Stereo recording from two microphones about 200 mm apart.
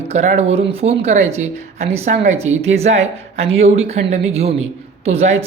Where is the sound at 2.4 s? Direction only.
80° right.